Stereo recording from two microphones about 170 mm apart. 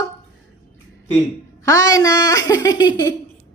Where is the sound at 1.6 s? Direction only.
20° left (ahead or behind).